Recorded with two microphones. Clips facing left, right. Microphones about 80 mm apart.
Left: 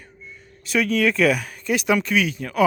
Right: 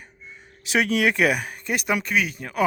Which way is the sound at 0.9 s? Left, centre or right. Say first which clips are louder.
Left 3 dB; right.